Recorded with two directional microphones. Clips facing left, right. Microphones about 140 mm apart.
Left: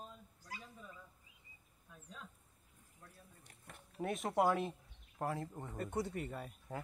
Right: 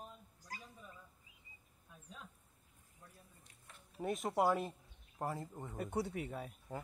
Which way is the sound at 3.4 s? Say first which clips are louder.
Left 4 dB; 60° left (ahead or behind).